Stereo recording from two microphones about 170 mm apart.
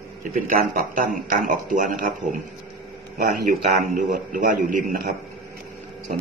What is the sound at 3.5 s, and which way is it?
A man's voice, 55° right (ahead or behind).